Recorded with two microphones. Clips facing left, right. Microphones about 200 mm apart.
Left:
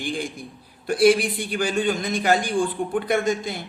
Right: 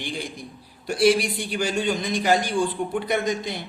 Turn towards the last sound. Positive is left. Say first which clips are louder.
# left 2 dB
turn(degrees=50)  # may be behind; listen again after turning